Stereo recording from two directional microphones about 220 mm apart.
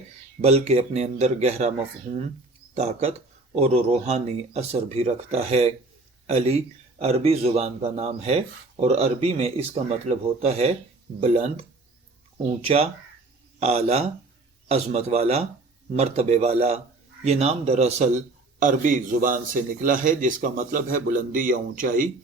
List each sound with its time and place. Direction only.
0.4 s speech: 30° right (ahead or behind)
12.6 s a man's voice: 25° right (ahead or behind)